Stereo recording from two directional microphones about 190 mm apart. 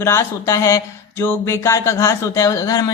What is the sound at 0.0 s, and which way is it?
Speech, 15° left (ahead or behind).